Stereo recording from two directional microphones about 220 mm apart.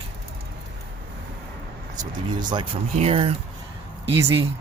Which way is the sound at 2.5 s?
25° right (ahead or behind).